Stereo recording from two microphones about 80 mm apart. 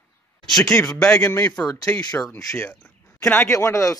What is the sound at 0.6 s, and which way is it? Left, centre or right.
Speech, left.